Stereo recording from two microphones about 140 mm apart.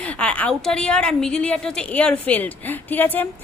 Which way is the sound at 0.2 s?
10° left (ahead or behind).